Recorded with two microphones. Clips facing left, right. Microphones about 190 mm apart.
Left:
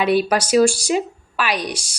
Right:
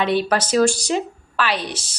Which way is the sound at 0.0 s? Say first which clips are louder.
Left 2 dB; 10° left (ahead or behind).